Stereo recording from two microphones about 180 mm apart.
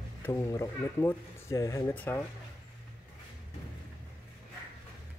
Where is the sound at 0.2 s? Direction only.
20° left (ahead or behind).